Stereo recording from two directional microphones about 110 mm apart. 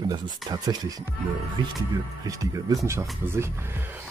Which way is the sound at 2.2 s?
30° right (ahead or behind).